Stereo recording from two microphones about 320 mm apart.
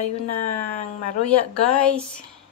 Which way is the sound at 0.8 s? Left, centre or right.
Left.